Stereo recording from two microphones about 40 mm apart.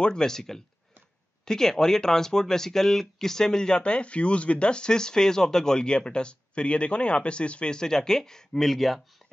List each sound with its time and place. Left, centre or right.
0.0 s speech: centre